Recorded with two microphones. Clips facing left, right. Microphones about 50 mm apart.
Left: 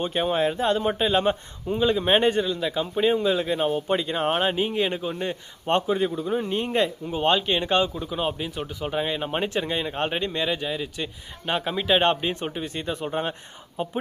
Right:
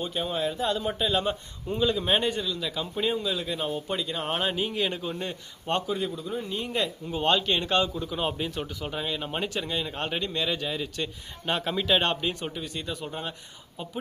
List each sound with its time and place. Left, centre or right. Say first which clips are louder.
0.0 s speech: left 6 dB; left
1.6 s speech: left 3 dB; centre
1.9 s speech: left 7 dB; left
7.0 s speech: left 3 dB; centre; by 13.9 s left